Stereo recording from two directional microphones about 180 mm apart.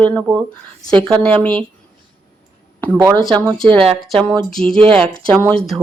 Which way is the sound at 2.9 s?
10° right (ahead or behind).